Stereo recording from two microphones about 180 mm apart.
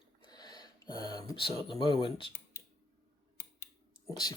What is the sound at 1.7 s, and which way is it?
Speech, 30° left (ahead or behind).